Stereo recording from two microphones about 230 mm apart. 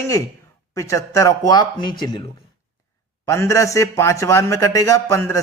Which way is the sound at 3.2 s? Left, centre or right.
Centre.